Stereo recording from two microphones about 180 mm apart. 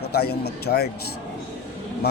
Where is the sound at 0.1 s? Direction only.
60° left (ahead or behind).